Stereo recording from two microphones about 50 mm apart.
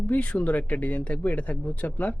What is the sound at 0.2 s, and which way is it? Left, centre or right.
Speech, left.